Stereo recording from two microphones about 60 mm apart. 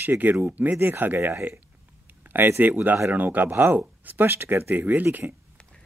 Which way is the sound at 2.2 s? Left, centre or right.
Right.